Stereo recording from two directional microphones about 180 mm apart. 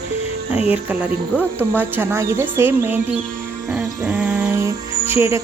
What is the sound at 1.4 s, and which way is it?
Speech, 10° right (ahead or behind).